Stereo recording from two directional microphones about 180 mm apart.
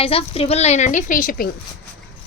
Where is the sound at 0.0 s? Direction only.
30° left (ahead or behind); by 1.5 s 50° left (ahead or behind).